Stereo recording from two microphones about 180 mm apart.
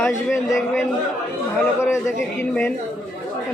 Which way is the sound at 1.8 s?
15° left (ahead or behind).